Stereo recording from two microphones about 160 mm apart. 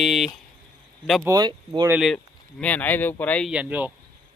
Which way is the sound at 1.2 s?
25° right (ahead or behind).